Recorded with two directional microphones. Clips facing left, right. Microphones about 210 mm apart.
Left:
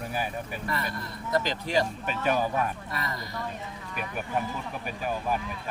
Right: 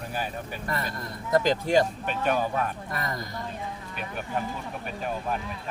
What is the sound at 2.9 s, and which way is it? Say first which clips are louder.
Speech: right 2 dB; 45° right (ahead or behind).